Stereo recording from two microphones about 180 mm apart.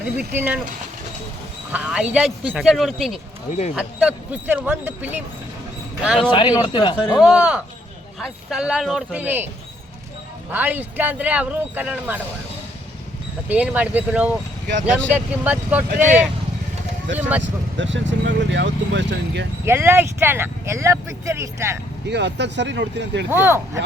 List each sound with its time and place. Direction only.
0.0 s speech: 10° right (ahead or behind)
1.7 s speech: 5° right (ahead or behind)
6.3 s speech: 25° left (ahead or behind)
7.2 s speech: 5° right (ahead or behind)
10.5 s speech: 10° right (ahead or behind)
13.5 s speech: 10° right (ahead or behind)
17.2 s speech: 10° right (ahead or behind)
17.4 s speech: 90° right; by 19.5 s 75° right (ahead or behind)
19.6 s speech: 10° right (ahead or behind)
22.0 s speech: 70° right (ahead or behind)
23.3 s speech: 15° right (ahead or behind)